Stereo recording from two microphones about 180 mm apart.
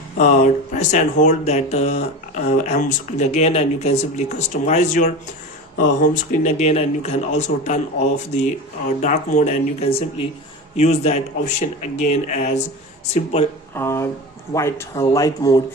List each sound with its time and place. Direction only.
0.2 s speech: 40° left (ahead or behind)
13.7 s speech: 15° left (ahead or behind)